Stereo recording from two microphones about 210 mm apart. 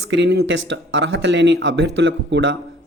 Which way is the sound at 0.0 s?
55° right (ahead or behind).